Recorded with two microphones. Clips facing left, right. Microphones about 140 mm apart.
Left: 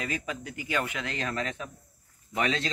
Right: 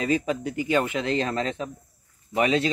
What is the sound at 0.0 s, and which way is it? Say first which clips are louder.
Speech: right 10 dB; 25° right (ahead or behind).